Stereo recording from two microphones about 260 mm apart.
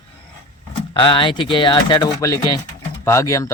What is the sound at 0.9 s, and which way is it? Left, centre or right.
Speech, centre.